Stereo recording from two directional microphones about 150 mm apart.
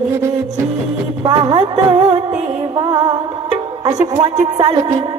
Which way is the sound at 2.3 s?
45° right (ahead or behind).